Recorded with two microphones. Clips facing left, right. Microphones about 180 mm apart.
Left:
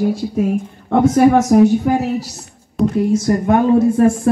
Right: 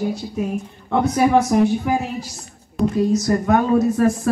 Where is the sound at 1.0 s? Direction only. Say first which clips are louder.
Left 5 dB; 45° left (ahead or behind).